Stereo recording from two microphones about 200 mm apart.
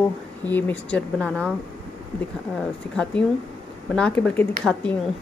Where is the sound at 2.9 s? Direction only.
5° left (ahead or behind).